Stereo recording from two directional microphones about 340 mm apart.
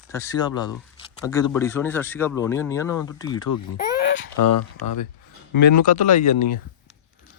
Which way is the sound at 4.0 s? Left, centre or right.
Left.